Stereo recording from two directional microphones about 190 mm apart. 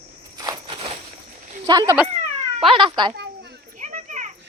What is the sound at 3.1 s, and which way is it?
Children playing, 60° right (ahead or behind).